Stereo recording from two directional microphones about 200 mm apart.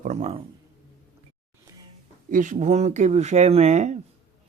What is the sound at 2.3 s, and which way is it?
Speech, 40° right (ahead or behind).